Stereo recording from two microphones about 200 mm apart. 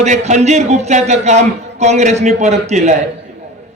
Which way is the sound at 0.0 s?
35° right (ahead or behind).